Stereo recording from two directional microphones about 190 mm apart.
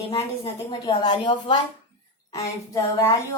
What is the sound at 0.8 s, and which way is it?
A woman's voice, 20° left (ahead or behind).